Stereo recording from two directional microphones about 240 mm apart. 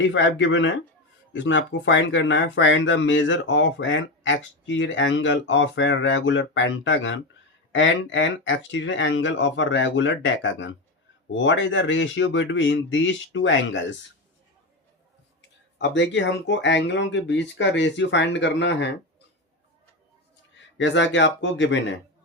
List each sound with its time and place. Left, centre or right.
0.0 s speech: left
15.4 s speech: left
20.7 s speech: left